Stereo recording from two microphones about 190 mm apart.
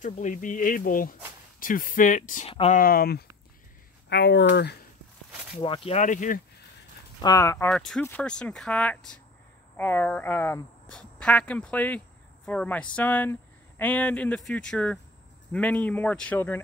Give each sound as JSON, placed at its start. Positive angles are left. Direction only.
{"t": 0.0, "sound": "speech", "side_deg": 40}
{"t": 5.6, "sound": "speech", "side_deg": 30}
{"t": 7.2, "sound": "speech", "side_deg": 20}